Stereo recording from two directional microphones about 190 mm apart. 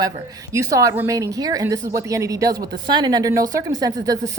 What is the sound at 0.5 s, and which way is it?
A woman's voice, 15° right (ahead or behind).